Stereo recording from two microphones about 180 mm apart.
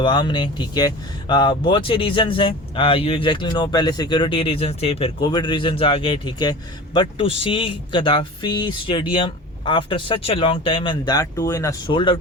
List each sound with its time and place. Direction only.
0.0 s speech: 25° left (ahead or behind)